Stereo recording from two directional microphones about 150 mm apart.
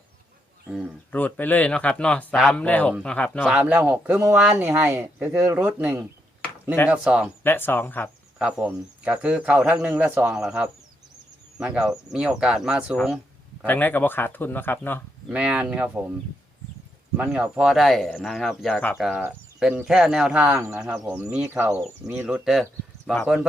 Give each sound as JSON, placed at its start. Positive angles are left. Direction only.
{"t": 1.1, "sound": "speech", "side_deg": 10}
{"t": 3.5, "sound": "speech", "side_deg": -10}
{"t": 7.4, "sound": "speech", "side_deg": 15}
{"t": 8.4, "sound": "speech", "side_deg": -5}
{"t": 9.9, "sound": "speech", "side_deg": -15}
{"t": 10.2, "sound": "speech", "side_deg": -5}
{"t": 13.7, "sound": "speech", "side_deg": 10}
{"t": 15.3, "sound": "speech", "side_deg": -5}
{"t": 17.2, "sound": "speech", "side_deg": -5}
{"t": 23.0, "sound": "speech", "side_deg": 0}